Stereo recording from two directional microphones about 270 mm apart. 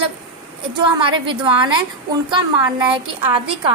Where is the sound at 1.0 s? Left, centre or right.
Centre.